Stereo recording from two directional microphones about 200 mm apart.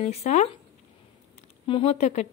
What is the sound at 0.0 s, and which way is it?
Speech, 35° left (ahead or behind).